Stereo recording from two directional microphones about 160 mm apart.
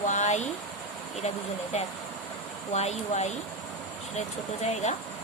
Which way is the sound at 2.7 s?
45° left (ahead or behind).